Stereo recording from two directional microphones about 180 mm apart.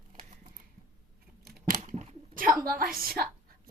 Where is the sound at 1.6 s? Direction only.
45° right (ahead or behind).